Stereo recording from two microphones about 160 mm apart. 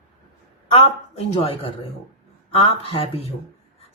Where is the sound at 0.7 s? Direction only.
40° left (ahead or behind).